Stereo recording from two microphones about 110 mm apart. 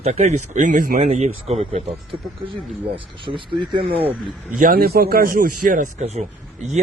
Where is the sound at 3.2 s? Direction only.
50° right (ahead or behind).